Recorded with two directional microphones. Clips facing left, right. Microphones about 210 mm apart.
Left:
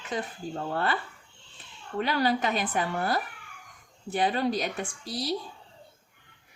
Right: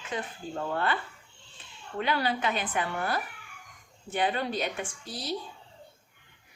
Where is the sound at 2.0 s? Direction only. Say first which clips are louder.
Left 3 dB; 40° left (ahead or behind).